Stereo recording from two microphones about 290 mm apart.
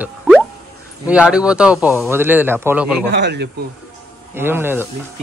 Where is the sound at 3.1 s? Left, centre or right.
Right.